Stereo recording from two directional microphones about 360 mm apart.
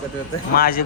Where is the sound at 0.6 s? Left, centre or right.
Left.